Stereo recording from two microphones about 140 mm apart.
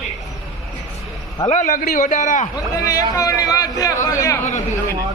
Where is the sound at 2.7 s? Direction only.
25° left (ahead or behind).